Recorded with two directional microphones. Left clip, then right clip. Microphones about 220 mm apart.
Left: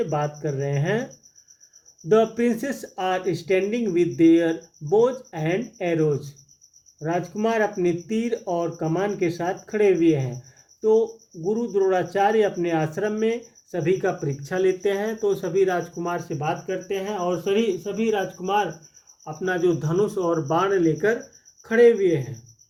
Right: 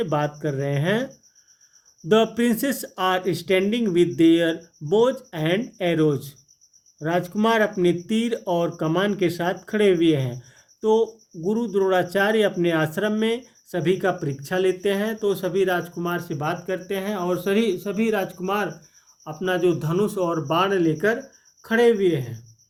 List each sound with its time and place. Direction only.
0.0 s speech: 45° right (ahead or behind)
2.0 s speech: 45° right (ahead or behind)
19.2 s speech: 40° right (ahead or behind)